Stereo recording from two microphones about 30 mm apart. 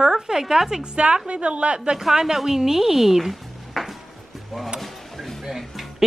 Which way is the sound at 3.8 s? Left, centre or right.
Centre.